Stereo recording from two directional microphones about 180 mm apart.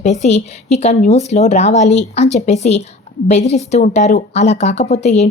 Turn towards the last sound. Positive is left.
turn(degrees=40)  # may be behind; listen again after turning